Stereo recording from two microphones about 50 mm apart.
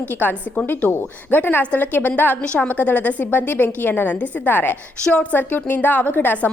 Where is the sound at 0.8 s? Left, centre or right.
Left.